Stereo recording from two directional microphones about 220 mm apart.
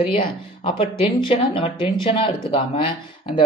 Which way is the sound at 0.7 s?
25° left (ahead or behind).